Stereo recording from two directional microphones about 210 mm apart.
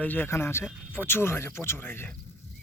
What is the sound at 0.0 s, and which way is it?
Speech, 10° left (ahead or behind).